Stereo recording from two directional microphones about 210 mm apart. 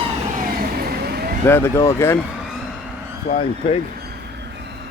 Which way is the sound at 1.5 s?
10° left (ahead or behind).